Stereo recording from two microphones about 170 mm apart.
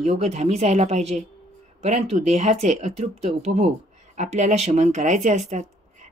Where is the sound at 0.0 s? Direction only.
40° right (ahead or behind).